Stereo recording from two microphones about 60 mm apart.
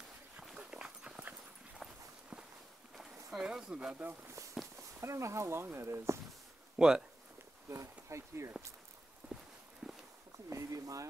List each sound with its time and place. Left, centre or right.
0.6 s dog: centre
1.8 s walk: centre
3.0 s a sound: centre
3.4 s speech: centre
4.6 s walk: centre
5.0 s speech: right
6.8 s speech: centre
7.7 s speech: right
9.2 s walk: right
9.8 s walk: centre
10.3 s a sound: right